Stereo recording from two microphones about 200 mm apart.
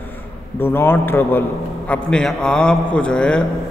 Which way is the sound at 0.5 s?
10° left (ahead or behind).